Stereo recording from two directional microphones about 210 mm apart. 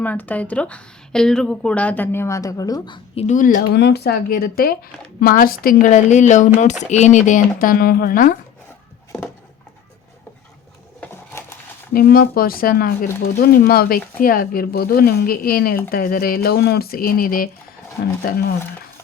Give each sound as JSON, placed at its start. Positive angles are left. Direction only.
{"t": 0.0, "sound": "a woman's voice", "side_deg": 5}
{"t": 3.2, "sound": "speech", "side_deg": 35}
{"t": 3.8, "sound": "speech", "side_deg": 50}
{"t": 11.0, "sound": "a sound", "side_deg": 10}
{"t": 11.9, "sound": "speech", "side_deg": 45}